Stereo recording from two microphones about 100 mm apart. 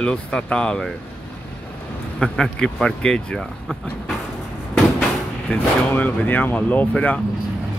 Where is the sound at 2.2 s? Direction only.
10° left (ahead or behind).